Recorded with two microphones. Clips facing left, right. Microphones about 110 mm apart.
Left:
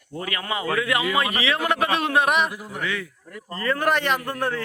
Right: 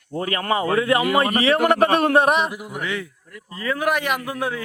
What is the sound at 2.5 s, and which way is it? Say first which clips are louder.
Speech: right 2 dB; 15° right (ahead or behind).